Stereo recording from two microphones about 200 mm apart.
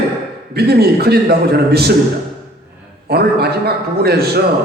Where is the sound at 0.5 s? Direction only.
50° right (ahead or behind).